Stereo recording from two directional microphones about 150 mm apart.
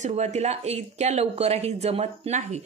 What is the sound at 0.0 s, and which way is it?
A woman's voice, 50° right (ahead or behind).